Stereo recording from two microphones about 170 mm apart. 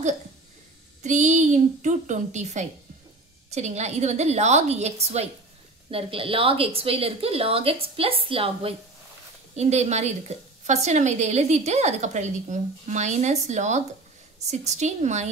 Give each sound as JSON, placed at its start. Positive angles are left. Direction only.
{"t": 1.0, "sound": "a woman's voice", "side_deg": -45}